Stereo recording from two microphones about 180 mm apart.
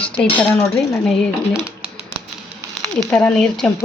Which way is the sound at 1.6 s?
5° right (ahead or behind).